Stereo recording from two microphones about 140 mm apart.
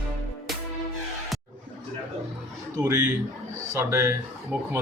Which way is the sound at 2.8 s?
20° right (ahead or behind).